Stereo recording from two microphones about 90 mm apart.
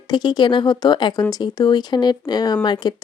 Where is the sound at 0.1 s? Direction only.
55° left (ahead or behind).